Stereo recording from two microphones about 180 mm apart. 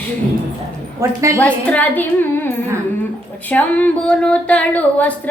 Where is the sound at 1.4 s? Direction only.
10° left (ahead or behind).